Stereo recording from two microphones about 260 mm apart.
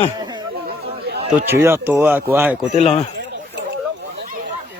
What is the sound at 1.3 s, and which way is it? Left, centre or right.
Speech, centre.